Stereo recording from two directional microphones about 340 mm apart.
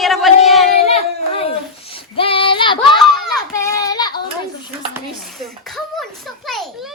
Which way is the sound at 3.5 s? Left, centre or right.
Centre.